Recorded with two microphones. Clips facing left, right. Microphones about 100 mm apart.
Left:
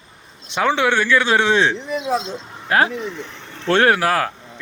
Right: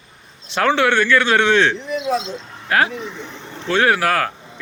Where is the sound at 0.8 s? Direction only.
10° left (ahead or behind).